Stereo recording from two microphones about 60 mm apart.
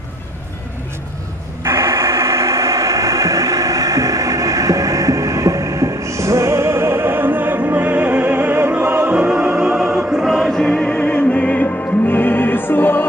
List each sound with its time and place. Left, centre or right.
1.6 s a sound: right
9.1 s music: centre
9.9 s choir: centre
10.2 s music: centre
10.9 s music: centre; by 13.0 s left